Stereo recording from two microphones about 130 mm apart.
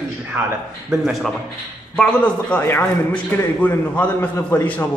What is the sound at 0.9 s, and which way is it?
Speech, 5° right (ahead or behind).